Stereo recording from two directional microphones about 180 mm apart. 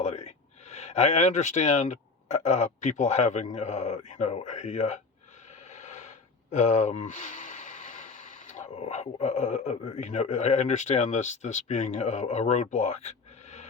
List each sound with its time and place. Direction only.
0.0 s speech: 40° left (ahead or behind)